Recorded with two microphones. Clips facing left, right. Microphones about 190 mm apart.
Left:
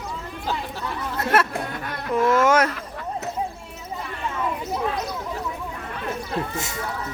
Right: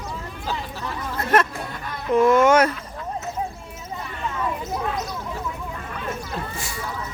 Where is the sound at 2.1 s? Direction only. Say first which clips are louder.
Right 3 dB; centre (ahead or behind).